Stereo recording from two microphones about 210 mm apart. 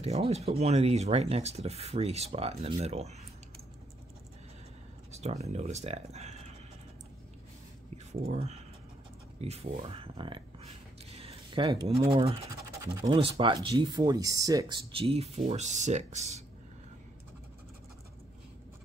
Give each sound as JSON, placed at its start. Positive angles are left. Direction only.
{"t": 0.0, "sound": "speech", "side_deg": -30}
{"t": 5.1, "sound": "speech", "side_deg": -30}
{"t": 7.9, "sound": "a sound", "side_deg": -35}
{"t": 9.4, "sound": "speech", "side_deg": -30}
{"t": 11.1, "sound": "a sound", "side_deg": -25}
{"t": 12.1, "sound": "speech", "side_deg": -25}